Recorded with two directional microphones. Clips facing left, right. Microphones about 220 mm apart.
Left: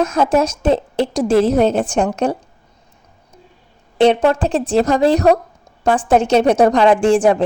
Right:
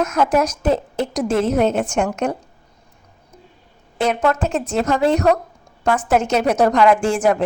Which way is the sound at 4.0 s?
30° left (ahead or behind).